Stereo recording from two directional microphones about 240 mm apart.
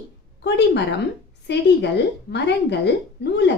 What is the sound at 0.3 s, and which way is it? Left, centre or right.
A woman's voice, left.